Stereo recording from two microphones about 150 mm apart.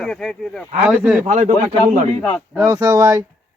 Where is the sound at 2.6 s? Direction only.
20° right (ahead or behind).